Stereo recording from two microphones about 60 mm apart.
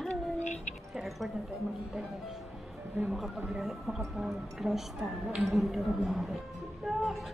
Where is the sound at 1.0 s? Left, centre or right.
Centre.